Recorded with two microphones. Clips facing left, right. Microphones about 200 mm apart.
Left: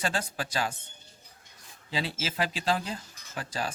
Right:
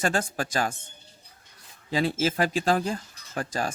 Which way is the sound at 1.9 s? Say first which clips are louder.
Right 8 dB; 50° right (ahead or behind).